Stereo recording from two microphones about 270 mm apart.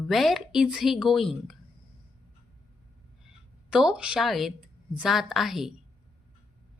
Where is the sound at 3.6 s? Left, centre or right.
Centre.